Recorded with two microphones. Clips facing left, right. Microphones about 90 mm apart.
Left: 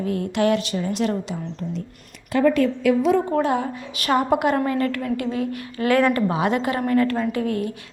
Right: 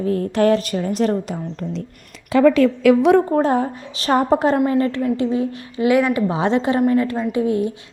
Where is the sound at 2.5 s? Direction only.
90° right; by 3.2 s 70° right (ahead or behind).